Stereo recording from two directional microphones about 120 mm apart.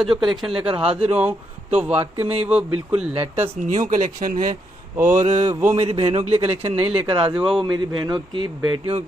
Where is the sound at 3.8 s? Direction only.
90° right.